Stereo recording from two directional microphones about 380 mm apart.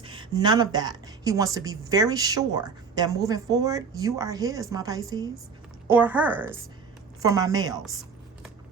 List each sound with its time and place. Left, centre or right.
0.0 s a woman's voice: centre